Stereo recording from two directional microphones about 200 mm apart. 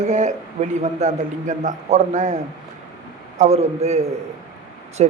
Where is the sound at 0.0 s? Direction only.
35° right (ahead or behind).